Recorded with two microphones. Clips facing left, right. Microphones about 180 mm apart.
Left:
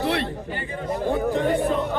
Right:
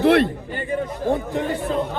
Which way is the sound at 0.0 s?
55° right (ahead or behind).